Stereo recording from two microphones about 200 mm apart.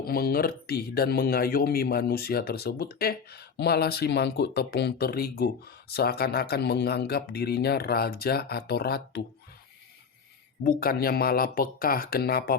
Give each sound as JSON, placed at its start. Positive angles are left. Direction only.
{"t": 0.0, "sound": "speech", "side_deg": 50}
{"t": 10.6, "sound": "speech", "side_deg": 45}